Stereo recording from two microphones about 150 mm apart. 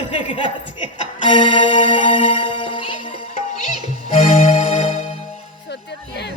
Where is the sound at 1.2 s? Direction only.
35° left (ahead or behind).